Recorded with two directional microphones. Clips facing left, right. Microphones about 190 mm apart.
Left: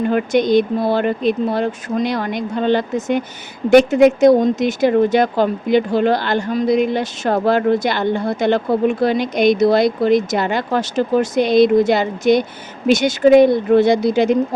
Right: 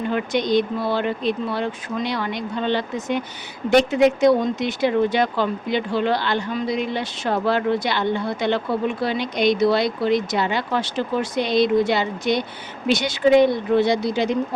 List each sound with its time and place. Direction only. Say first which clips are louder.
0.0 s speech: left 6 dB; 50° left (ahead or behind)